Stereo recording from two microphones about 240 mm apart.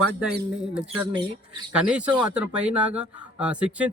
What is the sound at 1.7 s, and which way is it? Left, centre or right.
Speech, centre.